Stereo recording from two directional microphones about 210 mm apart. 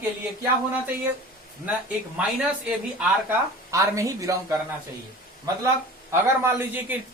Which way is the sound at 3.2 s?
15° right (ahead or behind).